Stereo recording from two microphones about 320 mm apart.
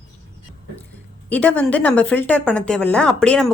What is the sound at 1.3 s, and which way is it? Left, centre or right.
A woman's voice, centre.